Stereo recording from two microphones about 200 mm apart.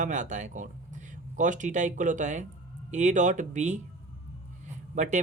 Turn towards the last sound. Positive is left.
turn(degrees=-35)  # may be behind; listen again after turning